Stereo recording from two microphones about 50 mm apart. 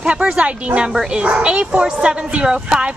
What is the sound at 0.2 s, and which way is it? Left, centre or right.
Speech, right.